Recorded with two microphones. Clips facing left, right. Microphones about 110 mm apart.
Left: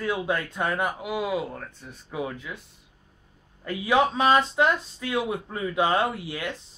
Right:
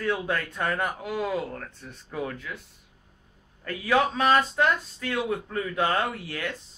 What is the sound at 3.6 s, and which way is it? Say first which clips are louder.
Speech: left 2 dB; 15° left (ahead or behind).